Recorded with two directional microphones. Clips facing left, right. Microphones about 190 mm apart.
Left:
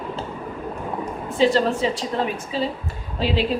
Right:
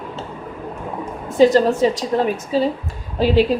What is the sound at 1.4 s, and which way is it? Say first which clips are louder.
A woman's voice: right 6 dB; 45° right (ahead or behind).